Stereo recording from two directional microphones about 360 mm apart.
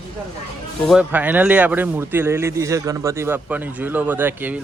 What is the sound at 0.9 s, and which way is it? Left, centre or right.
Speech, centre.